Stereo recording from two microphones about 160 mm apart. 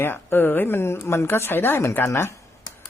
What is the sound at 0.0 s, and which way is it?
Speech, 15° left (ahead or behind).